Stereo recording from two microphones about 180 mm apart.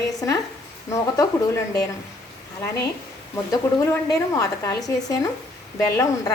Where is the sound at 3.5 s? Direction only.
20° left (ahead or behind).